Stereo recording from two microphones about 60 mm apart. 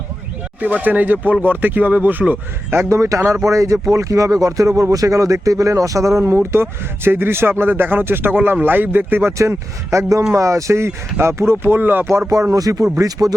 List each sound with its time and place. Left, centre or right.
0.6 s speech: right
2.9 s speech: right
9.4 s speech: right
12.3 s speech: right